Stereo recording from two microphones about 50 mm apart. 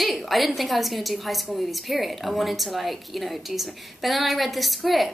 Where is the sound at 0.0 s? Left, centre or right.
Centre.